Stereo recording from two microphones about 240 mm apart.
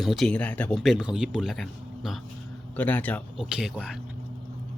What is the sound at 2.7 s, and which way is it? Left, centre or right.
Speech, centre.